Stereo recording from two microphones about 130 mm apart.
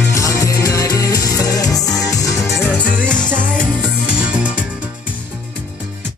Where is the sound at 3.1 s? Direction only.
5° left (ahead or behind).